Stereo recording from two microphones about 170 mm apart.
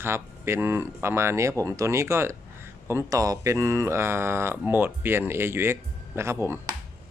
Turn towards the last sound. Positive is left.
turn(degrees=-15)  # may be behind; listen again after turning